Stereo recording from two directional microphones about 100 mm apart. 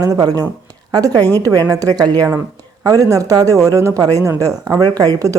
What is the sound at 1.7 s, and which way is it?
Speech, 40° right (ahead or behind).